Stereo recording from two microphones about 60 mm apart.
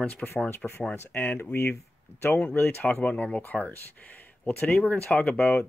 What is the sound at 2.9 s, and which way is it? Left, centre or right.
Speech, centre.